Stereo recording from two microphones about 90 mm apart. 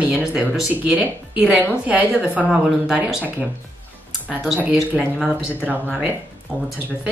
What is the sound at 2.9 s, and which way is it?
Speech, 15° right (ahead or behind).